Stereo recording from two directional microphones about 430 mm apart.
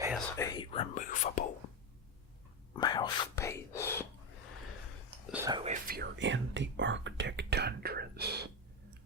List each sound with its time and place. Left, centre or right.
0.3 s speech: centre
2.7 s speech: centre
5.3 s speech: centre